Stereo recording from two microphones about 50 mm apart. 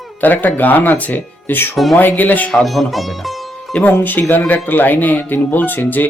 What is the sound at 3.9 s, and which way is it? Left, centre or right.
Speech, left.